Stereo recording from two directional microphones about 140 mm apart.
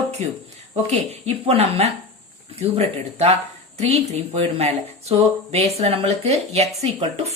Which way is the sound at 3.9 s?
50° right (ahead or behind).